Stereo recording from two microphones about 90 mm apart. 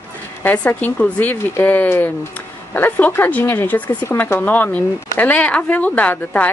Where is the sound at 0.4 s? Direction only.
20° left (ahead or behind).